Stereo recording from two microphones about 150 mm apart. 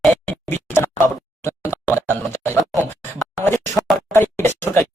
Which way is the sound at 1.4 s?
15° left (ahead or behind).